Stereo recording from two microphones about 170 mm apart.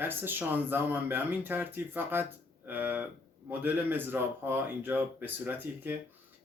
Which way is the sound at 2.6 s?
10° right (ahead or behind).